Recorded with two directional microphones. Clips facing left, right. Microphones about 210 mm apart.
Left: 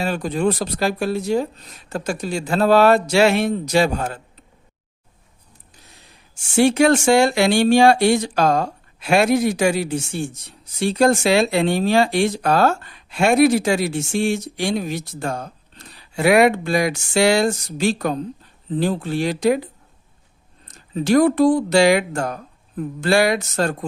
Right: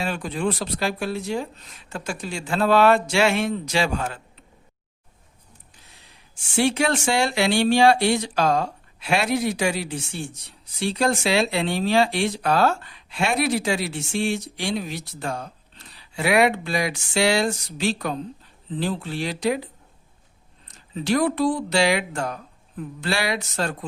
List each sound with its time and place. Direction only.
0.0 s speech: 40° left (ahead or behind)
6.6 s speech: 45° left (ahead or behind)
20.7 s speech: 45° left (ahead or behind)